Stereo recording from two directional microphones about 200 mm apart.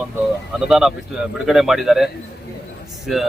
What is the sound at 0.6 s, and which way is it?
Speech, centre (ahead or behind).